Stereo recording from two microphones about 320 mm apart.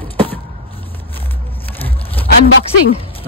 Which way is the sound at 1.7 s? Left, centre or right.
Centre.